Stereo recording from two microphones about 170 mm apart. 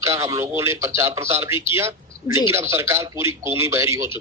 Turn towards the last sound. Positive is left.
turn(degrees=-15)  # may be behind; listen again after turning